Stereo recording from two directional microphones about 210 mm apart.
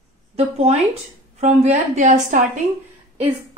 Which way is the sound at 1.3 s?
30° right (ahead or behind).